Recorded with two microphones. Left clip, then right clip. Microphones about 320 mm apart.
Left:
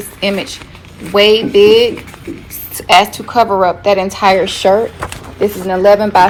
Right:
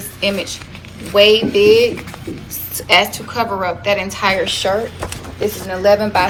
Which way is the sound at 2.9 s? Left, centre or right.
Centre.